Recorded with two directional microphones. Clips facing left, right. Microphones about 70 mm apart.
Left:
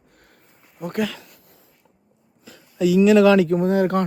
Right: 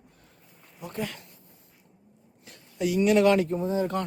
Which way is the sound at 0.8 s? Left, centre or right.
Left.